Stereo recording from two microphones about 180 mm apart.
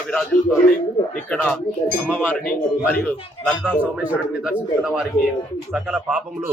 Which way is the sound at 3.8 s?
10° right (ahead or behind).